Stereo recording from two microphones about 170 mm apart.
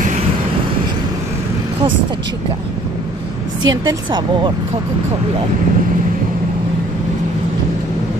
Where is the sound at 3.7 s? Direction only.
25° right (ahead or behind).